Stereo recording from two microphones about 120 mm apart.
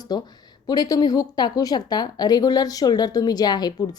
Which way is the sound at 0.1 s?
35° left (ahead or behind).